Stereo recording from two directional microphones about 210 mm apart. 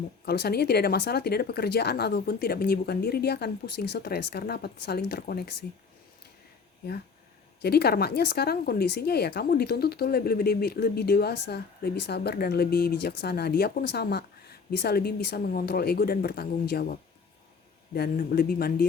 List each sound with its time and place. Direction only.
0.3 s speech: 50° left (ahead or behind)
7.6 s speech: 50° left (ahead or behind)
17.9 s speech: 50° left (ahead or behind)